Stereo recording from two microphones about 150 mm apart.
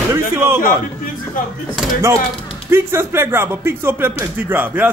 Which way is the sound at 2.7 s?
15° right (ahead or behind).